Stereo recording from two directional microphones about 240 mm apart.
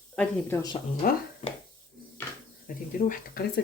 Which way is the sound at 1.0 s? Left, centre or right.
Left.